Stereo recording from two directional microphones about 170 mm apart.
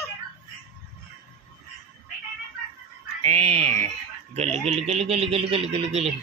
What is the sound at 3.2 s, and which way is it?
Speech, 35° right (ahead or behind).